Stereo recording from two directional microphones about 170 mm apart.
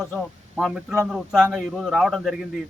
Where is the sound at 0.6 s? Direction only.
Centre (ahead or behind).